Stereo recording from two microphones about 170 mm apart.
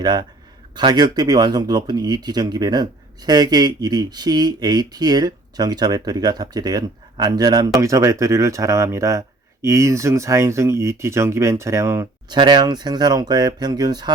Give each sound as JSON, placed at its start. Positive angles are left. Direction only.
{"t": 0.0, "sound": "speech", "side_deg": -25}
{"t": 12.3, "sound": "speech", "side_deg": -25}